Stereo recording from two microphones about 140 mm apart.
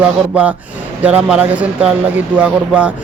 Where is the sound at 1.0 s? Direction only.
10° right (ahead or behind).